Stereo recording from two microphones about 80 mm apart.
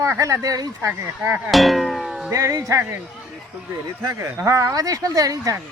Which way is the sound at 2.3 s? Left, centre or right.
Right.